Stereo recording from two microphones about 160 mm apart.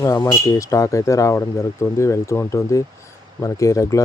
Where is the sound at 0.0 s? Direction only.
20° left (ahead or behind).